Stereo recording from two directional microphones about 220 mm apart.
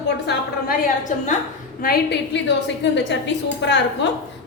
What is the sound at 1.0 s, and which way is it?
Speech, 35° left (ahead or behind).